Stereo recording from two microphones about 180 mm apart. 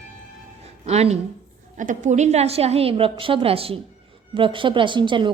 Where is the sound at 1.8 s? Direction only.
45° right (ahead or behind).